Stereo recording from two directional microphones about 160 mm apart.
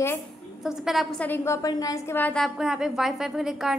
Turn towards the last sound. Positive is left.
turn(degrees=0)  # may be behind; listen again after turning